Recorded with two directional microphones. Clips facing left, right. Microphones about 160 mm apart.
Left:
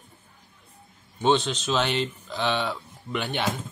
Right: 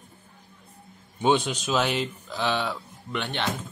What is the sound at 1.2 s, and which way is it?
Speech, 10° right (ahead or behind).